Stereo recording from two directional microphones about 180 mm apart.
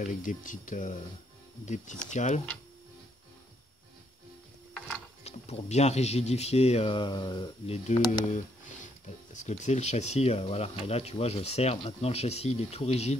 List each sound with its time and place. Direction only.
0.0 s speech: 45° left (ahead or behind)
5.2 s speech: 35° left (ahead or behind)
9.3 s speech: 40° left (ahead or behind)